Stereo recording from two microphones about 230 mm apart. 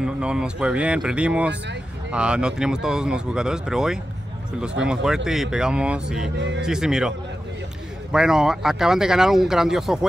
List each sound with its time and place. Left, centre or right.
0.0 s speech: centre
6.3 s speech: right
6.6 s speech: centre